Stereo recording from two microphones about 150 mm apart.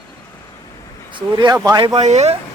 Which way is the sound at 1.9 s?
45° right (ahead or behind).